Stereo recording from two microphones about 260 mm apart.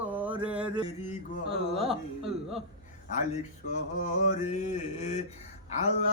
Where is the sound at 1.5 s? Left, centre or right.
Right.